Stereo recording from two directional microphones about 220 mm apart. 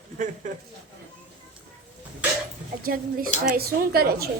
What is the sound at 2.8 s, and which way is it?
A child's voice, 40° right (ahead or behind).